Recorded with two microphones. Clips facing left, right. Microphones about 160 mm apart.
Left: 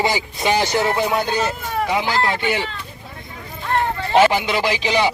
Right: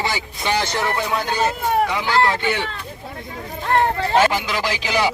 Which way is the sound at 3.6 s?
50° right (ahead or behind).